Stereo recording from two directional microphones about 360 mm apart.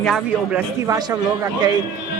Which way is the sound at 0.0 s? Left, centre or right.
Centre.